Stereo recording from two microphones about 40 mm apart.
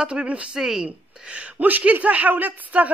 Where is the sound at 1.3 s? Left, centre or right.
Right.